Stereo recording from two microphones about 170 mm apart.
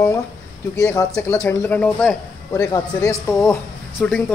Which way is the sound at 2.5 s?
20° left (ahead or behind).